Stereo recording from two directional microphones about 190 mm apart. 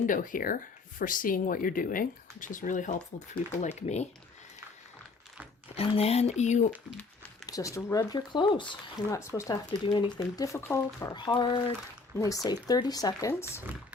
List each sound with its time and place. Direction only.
0.1 s speech: 45° left (ahead or behind)
5.7 s speech: 30° left (ahead or behind)
7.4 s speech: 15° left (ahead or behind)